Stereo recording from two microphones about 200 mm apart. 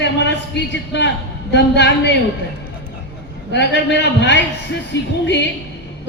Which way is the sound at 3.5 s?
60° left (ahead or behind).